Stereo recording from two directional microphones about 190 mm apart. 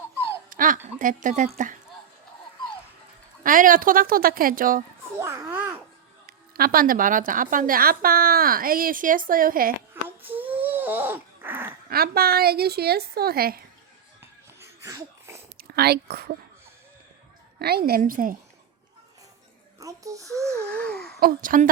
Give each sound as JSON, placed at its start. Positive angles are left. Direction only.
{"t": 0.5, "sound": "a sound", "side_deg": -45}
{"t": 0.9, "sound": "speech", "side_deg": -40}
{"t": 3.4, "sound": "a woman's voice", "side_deg": -45}
{"t": 5.2, "sound": "a child's voice", "side_deg": -15}
{"t": 6.2, "sound": "a woman's voice", "side_deg": -50}
{"t": 9.9, "sound": "a sound", "side_deg": -10}
{"t": 11.9, "sound": "a woman's voice", "side_deg": -55}
{"t": 14.2, "sound": "a sound", "side_deg": -15}
{"t": 15.5, "sound": "speech", "side_deg": -55}
{"t": 17.6, "sound": "a woman's voice", "side_deg": -55}
{"t": 19.8, "sound": "a child's voice", "side_deg": -15}
{"t": 20.5, "sound": "a sound", "side_deg": 5}
{"t": 21.2, "sound": "a woman's voice", "side_deg": -50}